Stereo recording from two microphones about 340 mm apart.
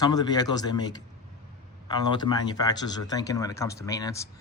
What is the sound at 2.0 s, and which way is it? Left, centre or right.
Speech, centre.